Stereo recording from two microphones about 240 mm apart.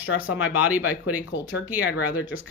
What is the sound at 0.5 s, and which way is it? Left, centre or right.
Speech, centre.